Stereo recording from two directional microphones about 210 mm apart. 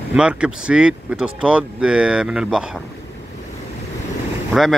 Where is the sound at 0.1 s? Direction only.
5° right (ahead or behind).